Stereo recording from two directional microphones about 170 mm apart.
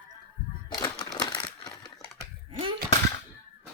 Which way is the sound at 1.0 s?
25° left (ahead or behind).